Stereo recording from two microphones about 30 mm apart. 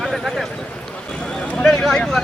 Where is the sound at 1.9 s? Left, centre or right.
Centre.